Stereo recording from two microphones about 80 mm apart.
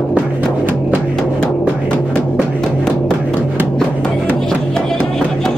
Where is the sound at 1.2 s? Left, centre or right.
Centre.